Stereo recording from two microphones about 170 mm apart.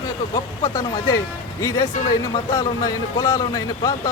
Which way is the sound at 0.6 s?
20° left (ahead or behind).